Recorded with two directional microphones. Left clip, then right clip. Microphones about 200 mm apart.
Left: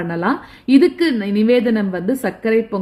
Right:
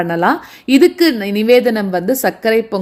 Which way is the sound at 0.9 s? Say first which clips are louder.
Right 4 dB; 15° right (ahead or behind).